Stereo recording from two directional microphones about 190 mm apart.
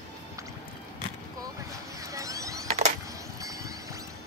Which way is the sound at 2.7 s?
35° right (ahead or behind).